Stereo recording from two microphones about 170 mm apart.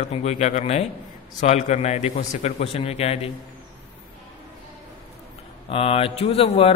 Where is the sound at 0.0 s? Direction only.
40° left (ahead or behind).